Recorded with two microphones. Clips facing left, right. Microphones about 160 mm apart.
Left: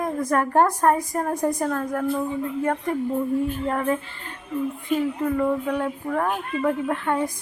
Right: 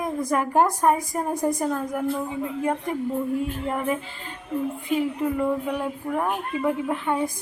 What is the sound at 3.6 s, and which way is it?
Speech, 10° right (ahead or behind).